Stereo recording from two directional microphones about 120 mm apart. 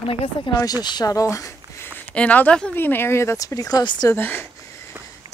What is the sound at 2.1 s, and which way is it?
Speech, 10° left (ahead or behind).